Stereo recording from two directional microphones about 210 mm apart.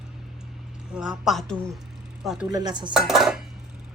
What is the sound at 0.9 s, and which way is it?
A woman's voice, 5° right (ahead or behind).